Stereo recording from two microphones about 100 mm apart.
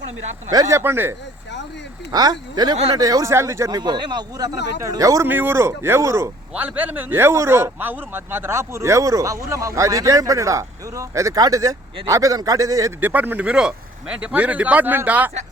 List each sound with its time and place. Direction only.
0.5 s speech: 40° right (ahead or behind)
0.8 s speech: 25° right (ahead or behind)
2.1 s speech: 45° right (ahead or behind)
5.2 s speech: 20° right (ahead or behind)
6.5 s speech: 15° right (ahead or behind); by 12.9 s 35° right (ahead or behind)
13.0 s speech: 20° right (ahead or behind)